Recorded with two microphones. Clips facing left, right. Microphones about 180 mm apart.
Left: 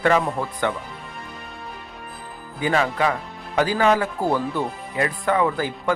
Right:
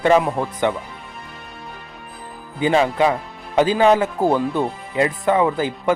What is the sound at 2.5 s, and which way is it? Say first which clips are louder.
Speech: right 5 dB; 20° right (ahead or behind).